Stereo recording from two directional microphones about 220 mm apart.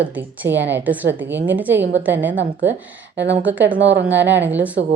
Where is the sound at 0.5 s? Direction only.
55° right (ahead or behind).